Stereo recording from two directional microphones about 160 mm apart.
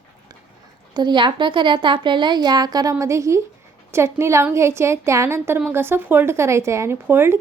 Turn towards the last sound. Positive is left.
turn(degrees=-15)  # may be behind; listen again after turning